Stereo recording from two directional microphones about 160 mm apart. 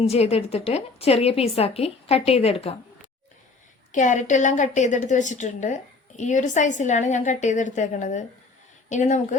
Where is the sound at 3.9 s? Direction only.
50° left (ahead or behind).